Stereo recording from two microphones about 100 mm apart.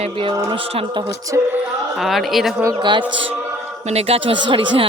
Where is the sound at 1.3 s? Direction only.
35° right (ahead or behind).